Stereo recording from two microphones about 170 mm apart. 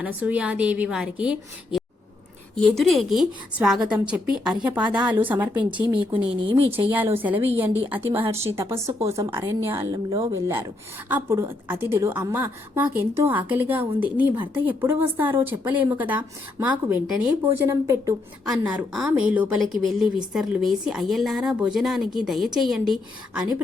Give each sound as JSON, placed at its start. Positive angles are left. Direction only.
{"t": 0.0, "sound": "a woman's voice", "side_deg": -10}
{"t": 6.7, "sound": "a woman's voice", "side_deg": -10}